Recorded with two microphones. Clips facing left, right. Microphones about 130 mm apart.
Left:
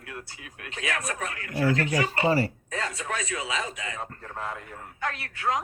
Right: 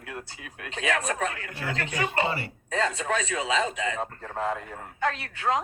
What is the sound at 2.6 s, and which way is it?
Speech, 25° right (ahead or behind).